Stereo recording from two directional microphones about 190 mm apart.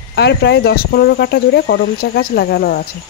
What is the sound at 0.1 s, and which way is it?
Speech, 60° left (ahead or behind).